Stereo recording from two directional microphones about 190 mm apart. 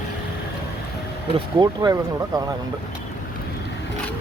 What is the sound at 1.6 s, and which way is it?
Speech, 20° right (ahead or behind).